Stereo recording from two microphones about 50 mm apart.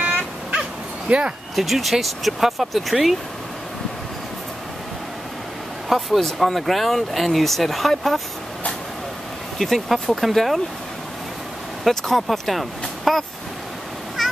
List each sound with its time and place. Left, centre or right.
0.5 s dog: right
1.5 s speech: centre
5.9 s speech: centre
9.6 s speech: centre
11.8 s speech: centre